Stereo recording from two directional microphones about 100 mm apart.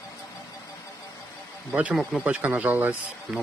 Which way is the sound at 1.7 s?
15° right (ahead or behind).